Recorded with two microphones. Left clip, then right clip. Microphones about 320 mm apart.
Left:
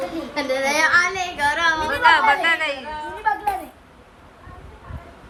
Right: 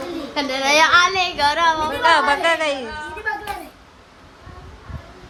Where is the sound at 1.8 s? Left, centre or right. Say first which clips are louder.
Even; centre.